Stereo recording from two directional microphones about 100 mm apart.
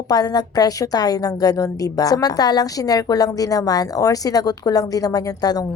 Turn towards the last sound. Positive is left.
turn(degrees=40)  # may be behind; listen again after turning